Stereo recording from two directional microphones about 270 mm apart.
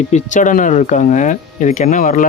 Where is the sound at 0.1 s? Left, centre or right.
Left.